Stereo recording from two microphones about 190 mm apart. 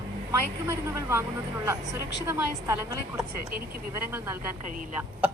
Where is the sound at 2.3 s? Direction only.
15° right (ahead or behind).